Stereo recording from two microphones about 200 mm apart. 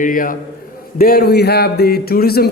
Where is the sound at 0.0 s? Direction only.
45° left (ahead or behind).